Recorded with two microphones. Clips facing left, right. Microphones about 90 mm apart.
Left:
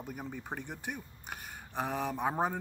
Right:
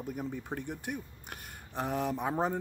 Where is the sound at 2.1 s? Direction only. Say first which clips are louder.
Even; 20° left (ahead or behind).